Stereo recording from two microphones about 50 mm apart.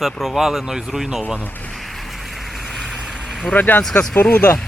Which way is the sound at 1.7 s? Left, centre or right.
Centre.